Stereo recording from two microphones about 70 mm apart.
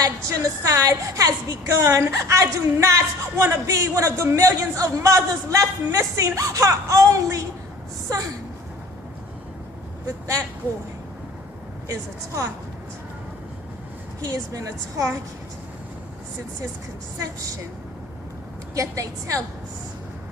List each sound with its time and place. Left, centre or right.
0.0 s a man's voice: right
1.8 s a man's voice: right
11.9 s a man's voice: right
14.2 s a woman's voice: right
18.7 s a man's voice: right